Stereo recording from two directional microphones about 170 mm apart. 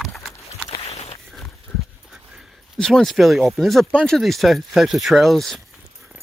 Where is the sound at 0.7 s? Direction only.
35° left (ahead or behind).